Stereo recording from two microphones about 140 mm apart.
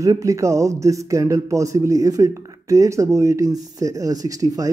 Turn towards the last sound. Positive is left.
turn(degrees=-25)  # may be behind; listen again after turning